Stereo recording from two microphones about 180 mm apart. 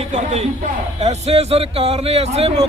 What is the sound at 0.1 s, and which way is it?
A man's voice, 40° right (ahead or behind).